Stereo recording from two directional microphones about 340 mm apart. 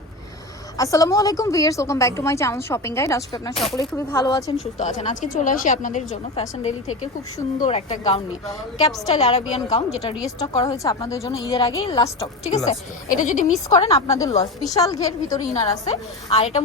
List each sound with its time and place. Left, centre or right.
0.8 s a woman's voice: centre